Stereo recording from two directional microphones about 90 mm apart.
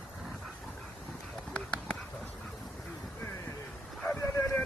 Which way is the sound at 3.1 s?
30° left (ahead or behind).